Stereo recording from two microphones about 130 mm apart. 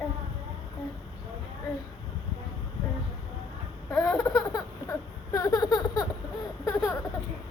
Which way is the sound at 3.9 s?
10° left (ahead or behind).